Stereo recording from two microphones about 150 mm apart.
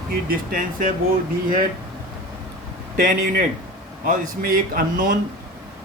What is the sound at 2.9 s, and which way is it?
Speech, 70° right (ahead or behind).